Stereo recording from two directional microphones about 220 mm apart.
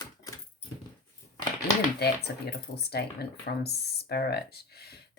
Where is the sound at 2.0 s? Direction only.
50° left (ahead or behind).